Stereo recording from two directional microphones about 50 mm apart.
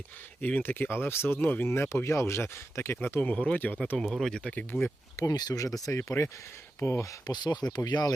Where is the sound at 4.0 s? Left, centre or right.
Centre.